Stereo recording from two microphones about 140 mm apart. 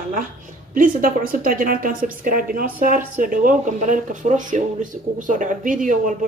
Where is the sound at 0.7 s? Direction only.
85° right.